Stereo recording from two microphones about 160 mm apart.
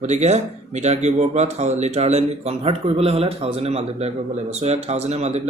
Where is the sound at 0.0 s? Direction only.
45° right (ahead or behind).